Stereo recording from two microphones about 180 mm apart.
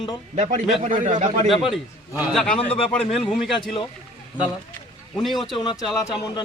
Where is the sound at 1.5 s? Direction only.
Centre (ahead or behind).